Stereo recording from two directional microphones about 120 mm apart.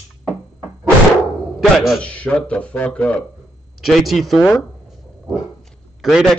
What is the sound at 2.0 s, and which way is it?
A man's voice, 10° left (ahead or behind).